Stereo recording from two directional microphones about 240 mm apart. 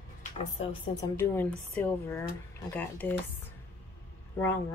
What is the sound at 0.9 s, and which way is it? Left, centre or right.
Speech, centre.